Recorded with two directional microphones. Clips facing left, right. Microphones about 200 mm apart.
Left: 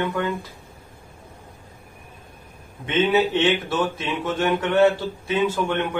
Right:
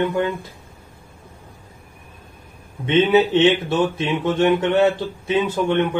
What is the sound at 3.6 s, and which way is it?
Speech, 25° right (ahead or behind).